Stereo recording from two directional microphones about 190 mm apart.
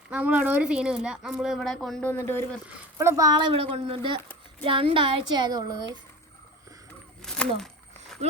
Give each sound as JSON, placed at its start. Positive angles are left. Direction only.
{"t": 0.1, "sound": "a woman's voice", "side_deg": -10}
{"t": 2.6, "sound": "speech", "side_deg": -15}
{"t": 7.2, "sound": "a sound", "side_deg": 5}